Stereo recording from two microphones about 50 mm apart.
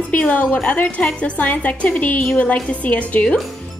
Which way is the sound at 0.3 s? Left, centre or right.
Left.